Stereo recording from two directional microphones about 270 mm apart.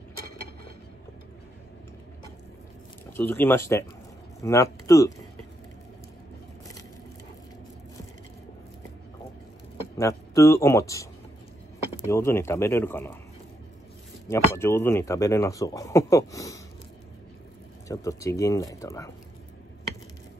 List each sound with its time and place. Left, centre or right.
3.1 s speech: centre
9.9 s speech: centre
14.2 s speech: centre
17.8 s speech: centre